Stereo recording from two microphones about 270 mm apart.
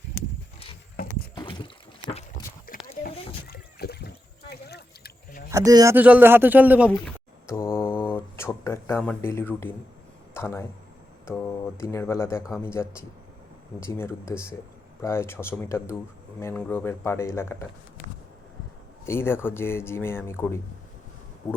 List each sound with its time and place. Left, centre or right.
1.4 s a sound: centre
2.8 s a sound: left
5.5 s speech: centre
7.4 s mantra: centre
8.1 s a sound: centre
9.0 s speech: centre
12.4 s speech: centre
12.6 s speech: centre
19.0 s speech: centre